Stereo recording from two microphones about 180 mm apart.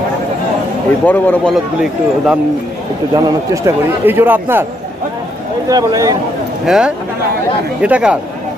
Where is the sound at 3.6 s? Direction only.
10° right (ahead or behind).